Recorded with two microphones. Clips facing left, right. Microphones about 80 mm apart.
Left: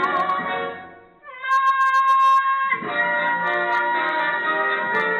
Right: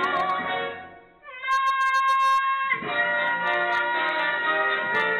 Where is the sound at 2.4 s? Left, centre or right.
Left.